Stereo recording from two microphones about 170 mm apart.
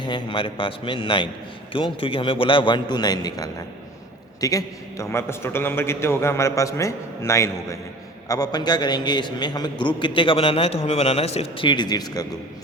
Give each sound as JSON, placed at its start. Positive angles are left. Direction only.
{"t": 0.0, "sound": "a man's voice", "side_deg": 30}